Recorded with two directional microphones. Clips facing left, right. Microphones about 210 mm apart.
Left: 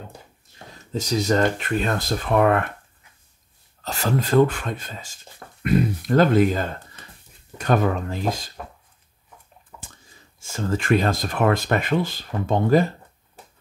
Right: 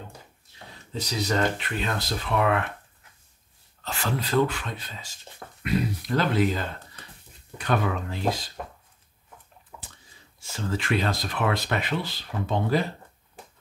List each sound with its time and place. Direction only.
0.9 s speech: 45° left (ahead or behind)
3.8 s speech: 40° left (ahead or behind)
9.7 s a sound: 5° right (ahead or behind)
10.4 s speech: 45° left (ahead or behind)